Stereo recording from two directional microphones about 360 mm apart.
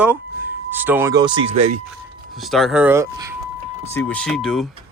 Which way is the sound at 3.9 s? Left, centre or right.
Centre.